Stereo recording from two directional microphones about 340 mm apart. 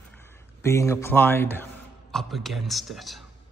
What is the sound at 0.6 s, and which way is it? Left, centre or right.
A man's voice, centre.